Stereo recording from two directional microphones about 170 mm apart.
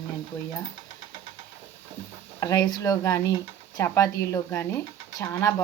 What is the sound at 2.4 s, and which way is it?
A woman's voice, 20° left (ahead or behind).